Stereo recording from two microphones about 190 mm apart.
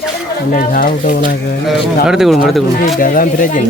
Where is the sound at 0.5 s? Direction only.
45° left (ahead or behind).